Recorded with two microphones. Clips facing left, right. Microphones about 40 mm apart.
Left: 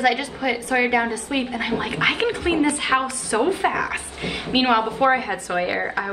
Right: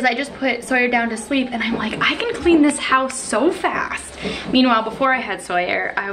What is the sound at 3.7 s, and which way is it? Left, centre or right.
Speech, centre.